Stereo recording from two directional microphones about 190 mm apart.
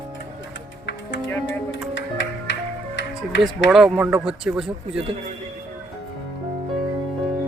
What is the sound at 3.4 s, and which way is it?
Speech, centre (ahead or behind).